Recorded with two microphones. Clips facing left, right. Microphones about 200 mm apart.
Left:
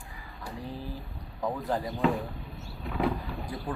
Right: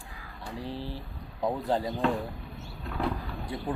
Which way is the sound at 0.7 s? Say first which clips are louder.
Right 2 dB; 30° right (ahead or behind).